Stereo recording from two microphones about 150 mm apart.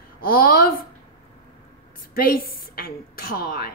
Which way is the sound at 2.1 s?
75° left (ahead or behind).